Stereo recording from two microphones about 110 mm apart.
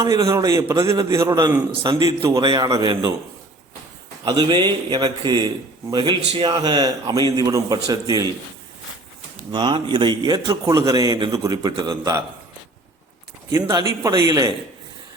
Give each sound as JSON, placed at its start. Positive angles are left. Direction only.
{"t": 0.0, "sound": "a man's voice", "side_deg": -30}
{"t": 4.2, "sound": "a man's voice", "side_deg": -45}
{"t": 9.5, "sound": "speech", "side_deg": -45}
{"t": 10.4, "sound": "a man's voice", "side_deg": -30}
{"t": 13.5, "sound": "a man's voice", "side_deg": -30}